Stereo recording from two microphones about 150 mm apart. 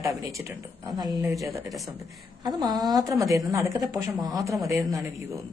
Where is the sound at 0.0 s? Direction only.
20° right (ahead or behind).